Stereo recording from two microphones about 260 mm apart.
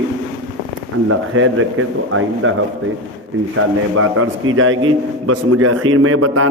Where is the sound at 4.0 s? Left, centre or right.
Right.